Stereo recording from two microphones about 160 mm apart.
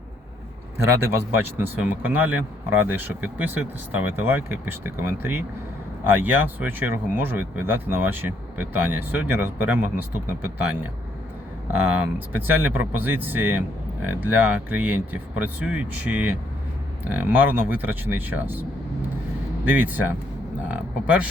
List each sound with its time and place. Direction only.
1.4 s speech: 10° right (ahead or behind)
11.9 s speech: 10° right (ahead or behind)
19.6 s speech: 10° right (ahead or behind)